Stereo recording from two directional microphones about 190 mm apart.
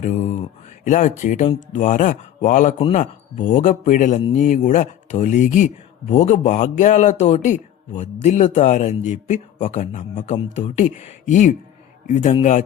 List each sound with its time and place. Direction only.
0.0 s a man's voice: 40° left (ahead or behind)